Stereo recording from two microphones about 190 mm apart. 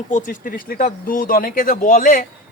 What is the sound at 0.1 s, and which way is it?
Speech, 45° left (ahead or behind).